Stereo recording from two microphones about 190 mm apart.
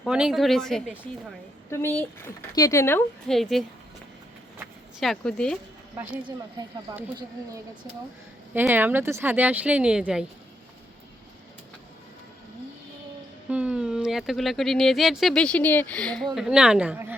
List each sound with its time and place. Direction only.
0.0 s speech: 5° right (ahead or behind); by 3.3 s 10° left (ahead or behind)
3.3 s speech: centre (ahead or behind)
4.9 s speech: centre (ahead or behind)
6.9 s speech: 20° right (ahead or behind)
8.5 s speech: 10° right (ahead or behind)
13.5 s speech: 5° right (ahead or behind)